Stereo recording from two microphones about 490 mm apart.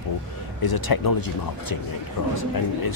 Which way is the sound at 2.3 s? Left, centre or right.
Left.